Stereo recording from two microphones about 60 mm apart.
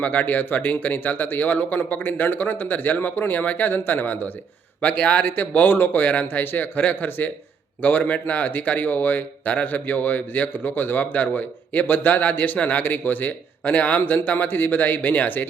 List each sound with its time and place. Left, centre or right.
0.0 s a man's voice: left